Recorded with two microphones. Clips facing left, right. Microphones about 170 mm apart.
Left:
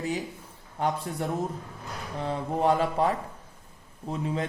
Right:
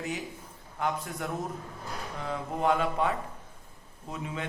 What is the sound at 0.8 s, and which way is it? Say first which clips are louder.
Speech: left 3 dB; 30° left (ahead or behind).